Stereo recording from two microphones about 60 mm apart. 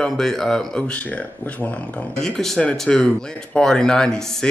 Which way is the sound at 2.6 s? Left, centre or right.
Centre.